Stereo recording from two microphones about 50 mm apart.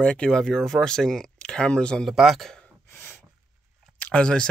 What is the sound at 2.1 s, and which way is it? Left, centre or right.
Speech, centre.